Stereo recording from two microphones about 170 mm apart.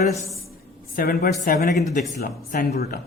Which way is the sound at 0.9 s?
60° left (ahead or behind).